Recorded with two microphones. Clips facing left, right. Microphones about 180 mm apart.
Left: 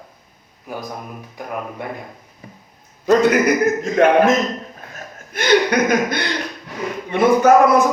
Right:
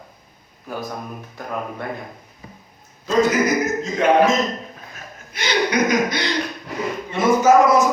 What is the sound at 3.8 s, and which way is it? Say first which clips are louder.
Speech: left 7 dB; 55° left (ahead or behind).